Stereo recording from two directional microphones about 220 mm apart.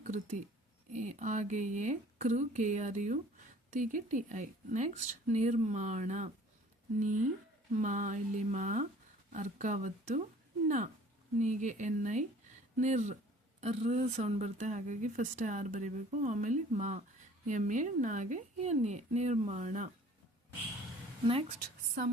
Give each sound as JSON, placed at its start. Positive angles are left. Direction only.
{"t": 0.0, "sound": "speech", "side_deg": -35}
{"t": 11.3, "sound": "speech", "side_deg": -35}